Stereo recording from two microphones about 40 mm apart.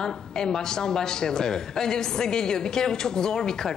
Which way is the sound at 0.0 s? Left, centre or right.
Centre.